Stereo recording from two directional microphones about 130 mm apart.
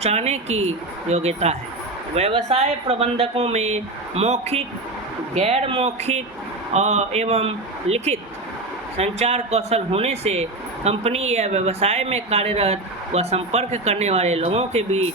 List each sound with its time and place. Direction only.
0.0 s a woman's voice: 55° right (ahead or behind)